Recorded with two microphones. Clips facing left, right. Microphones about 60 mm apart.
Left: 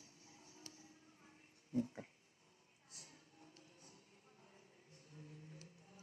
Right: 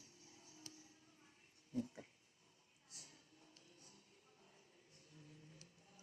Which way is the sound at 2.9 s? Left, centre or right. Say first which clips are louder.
Left 2 dB; left.